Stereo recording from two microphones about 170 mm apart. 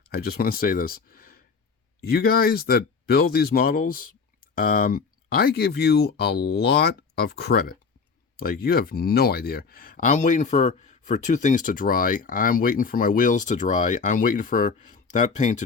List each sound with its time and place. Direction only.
0.1 s speech: 65° left (ahead or behind); by 15.6 s 45° left (ahead or behind)